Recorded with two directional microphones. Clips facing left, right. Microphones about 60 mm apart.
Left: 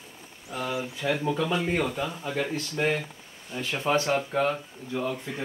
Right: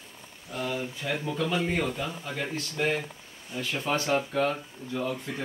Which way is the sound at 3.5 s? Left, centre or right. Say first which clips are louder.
Left 3 dB; left.